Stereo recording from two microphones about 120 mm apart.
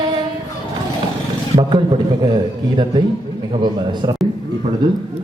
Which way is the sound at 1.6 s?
40° right (ahead or behind).